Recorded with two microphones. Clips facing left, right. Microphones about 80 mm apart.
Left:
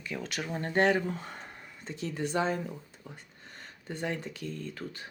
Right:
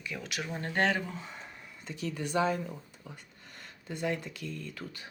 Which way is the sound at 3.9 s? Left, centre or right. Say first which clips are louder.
Right 1 dB; left.